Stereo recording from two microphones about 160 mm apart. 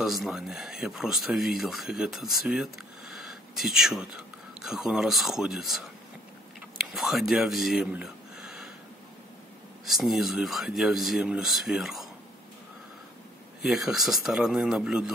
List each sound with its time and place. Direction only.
0.0 s speech: centre (ahead or behind)
9.8 s speech: centre (ahead or behind)
13.6 s speech: centre (ahead or behind)